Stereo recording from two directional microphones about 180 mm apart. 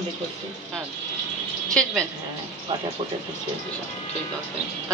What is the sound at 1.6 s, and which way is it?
Speech, 5° left (ahead or behind).